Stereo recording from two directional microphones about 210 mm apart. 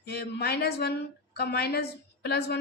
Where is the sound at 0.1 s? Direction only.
50° left (ahead or behind).